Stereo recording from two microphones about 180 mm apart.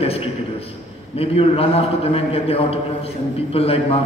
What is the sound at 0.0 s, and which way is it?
A man's voice, 30° left (ahead or behind).